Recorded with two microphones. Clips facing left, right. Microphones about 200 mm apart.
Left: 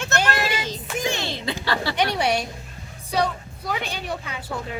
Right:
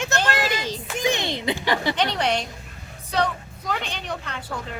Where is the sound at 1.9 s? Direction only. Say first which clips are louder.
Left 1 dB; 10° left (ahead or behind).